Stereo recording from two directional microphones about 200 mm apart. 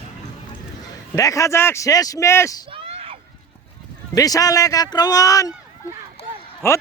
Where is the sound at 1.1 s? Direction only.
15° left (ahead or behind).